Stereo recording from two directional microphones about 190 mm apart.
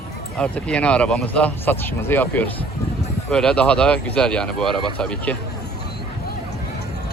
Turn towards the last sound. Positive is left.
turn(degrees=5)  # may be behind; listen again after turning